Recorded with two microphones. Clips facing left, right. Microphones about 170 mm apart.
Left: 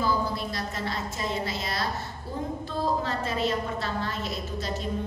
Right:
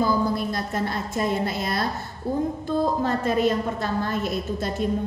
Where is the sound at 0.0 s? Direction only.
50° right (ahead or behind).